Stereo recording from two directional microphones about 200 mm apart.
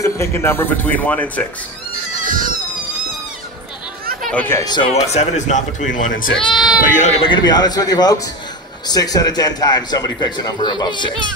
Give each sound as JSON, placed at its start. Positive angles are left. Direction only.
{"t": 0.0, "sound": "speech", "side_deg": 10}
{"t": 2.2, "sound": "cat", "side_deg": -40}
{"t": 4.0, "sound": "chatter", "side_deg": -45}
{"t": 4.3, "sound": "speech", "side_deg": 10}
{"t": 4.8, "sound": "speech", "side_deg": 35}
{"t": 6.5, "sound": "speech", "side_deg": 0}
{"t": 7.0, "sound": "speech", "side_deg": 30}